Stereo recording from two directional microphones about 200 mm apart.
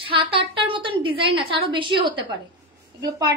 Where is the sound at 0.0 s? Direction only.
25° right (ahead or behind).